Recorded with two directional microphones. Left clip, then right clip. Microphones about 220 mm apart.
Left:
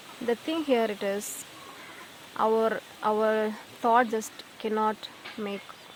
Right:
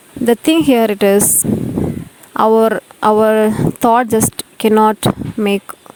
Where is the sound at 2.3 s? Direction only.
50° right (ahead or behind).